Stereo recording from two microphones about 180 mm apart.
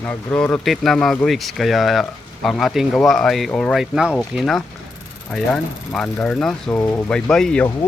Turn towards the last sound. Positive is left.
turn(degrees=5)  # may be behind; listen again after turning